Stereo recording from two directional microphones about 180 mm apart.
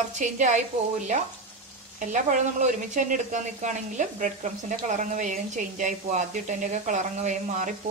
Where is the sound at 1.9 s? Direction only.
45° right (ahead or behind).